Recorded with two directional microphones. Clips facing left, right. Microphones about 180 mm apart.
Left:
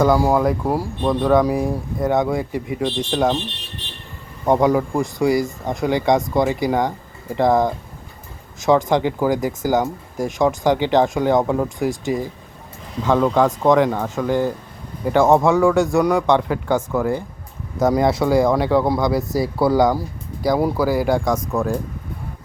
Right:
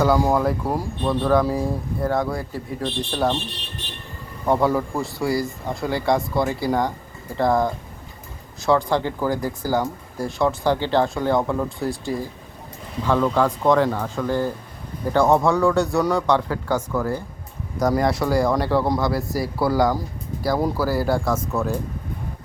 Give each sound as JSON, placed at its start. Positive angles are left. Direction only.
{"t": 0.0, "sound": "speech", "side_deg": 10}
{"t": 4.4, "sound": "speech", "side_deg": 20}